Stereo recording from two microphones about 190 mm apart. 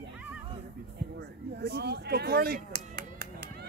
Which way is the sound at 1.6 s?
60° right (ahead or behind).